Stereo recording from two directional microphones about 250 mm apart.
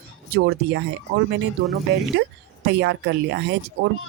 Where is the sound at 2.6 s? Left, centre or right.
Right.